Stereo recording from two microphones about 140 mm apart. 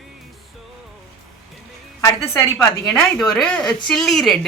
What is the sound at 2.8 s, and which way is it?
Speech, 10° left (ahead or behind).